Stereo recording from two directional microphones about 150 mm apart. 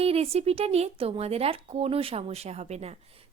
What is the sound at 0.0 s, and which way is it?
A woman's voice, 40° right (ahead or behind).